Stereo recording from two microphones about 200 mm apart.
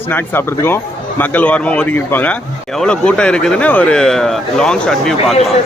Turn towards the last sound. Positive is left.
turn(degrees=0)  # may be behind; listen again after turning